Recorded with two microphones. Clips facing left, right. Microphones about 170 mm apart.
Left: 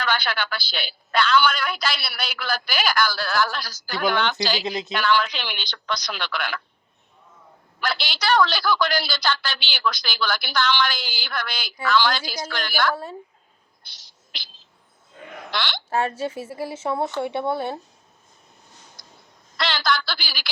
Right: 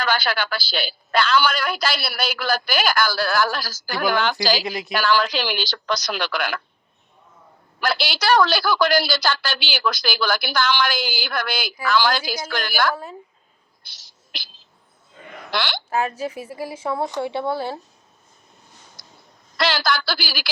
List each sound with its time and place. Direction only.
0.0 s a woman's voice: 40° right (ahead or behind)
4.6 s speech: 20° left (ahead or behind)
4.9 s a woman's voice: 40° right (ahead or behind)
7.9 s a woman's voice: 5° right (ahead or behind)
8.2 s a woman's voice: 40° right (ahead or behind)
12.2 s a woman's voice: 5° right (ahead or behind)
12.5 s a woman's voice: 45° right (ahead or behind)
13.8 s a sound: 5° right (ahead or behind)
15.9 s speech: 30° left (ahead or behind)
19.5 s a woman's voice: 40° right (ahead or behind)